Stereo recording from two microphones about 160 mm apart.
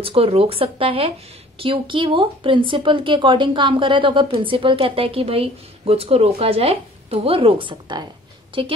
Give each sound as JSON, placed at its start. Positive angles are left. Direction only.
{"t": 0.0, "sound": "speech", "side_deg": -35}